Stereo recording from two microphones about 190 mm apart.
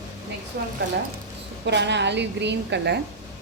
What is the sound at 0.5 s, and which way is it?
Speech, 60° right (ahead or behind).